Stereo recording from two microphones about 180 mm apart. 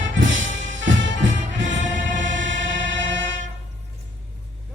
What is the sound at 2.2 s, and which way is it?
Choir, 90° right.